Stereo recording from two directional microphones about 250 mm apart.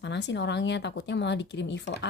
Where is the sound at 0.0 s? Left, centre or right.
Left.